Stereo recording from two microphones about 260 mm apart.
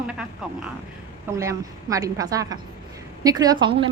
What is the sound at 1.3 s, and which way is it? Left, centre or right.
A woman's voice, centre.